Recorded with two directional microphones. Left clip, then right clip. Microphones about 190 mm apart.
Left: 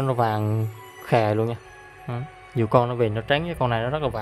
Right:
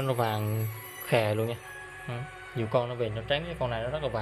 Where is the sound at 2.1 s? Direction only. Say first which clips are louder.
Left 8 dB; 45° left (ahead or behind).